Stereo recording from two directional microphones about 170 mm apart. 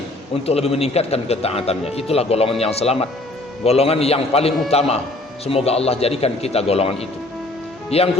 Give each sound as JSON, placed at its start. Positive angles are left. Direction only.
{"t": 0.4, "sound": "a man's voice", "side_deg": 35}